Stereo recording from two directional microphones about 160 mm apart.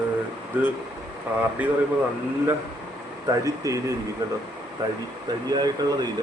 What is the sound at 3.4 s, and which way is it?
Speech, 20° right (ahead or behind).